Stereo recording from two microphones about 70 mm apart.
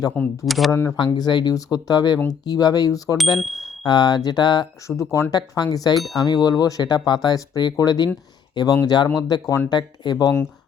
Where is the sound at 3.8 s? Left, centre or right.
Left.